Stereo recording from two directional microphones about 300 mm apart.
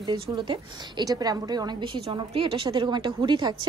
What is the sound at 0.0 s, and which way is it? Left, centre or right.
A woman's voice, centre.